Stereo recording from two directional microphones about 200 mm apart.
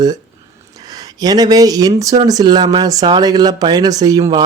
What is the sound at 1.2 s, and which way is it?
Speech, 20° right (ahead or behind).